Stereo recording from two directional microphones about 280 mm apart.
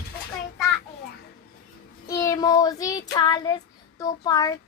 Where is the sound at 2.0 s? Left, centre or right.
Centre.